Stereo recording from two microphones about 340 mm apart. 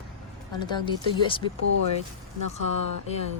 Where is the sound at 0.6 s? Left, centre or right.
Centre.